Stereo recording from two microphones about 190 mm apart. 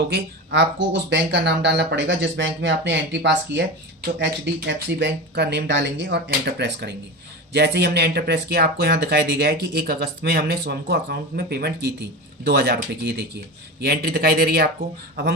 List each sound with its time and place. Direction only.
0.1 s speech: 65° right (ahead or behind)